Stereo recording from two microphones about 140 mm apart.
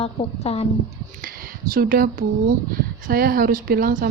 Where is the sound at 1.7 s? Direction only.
90° right.